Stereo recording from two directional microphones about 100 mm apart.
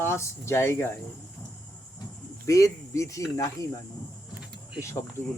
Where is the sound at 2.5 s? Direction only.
30° left (ahead or behind).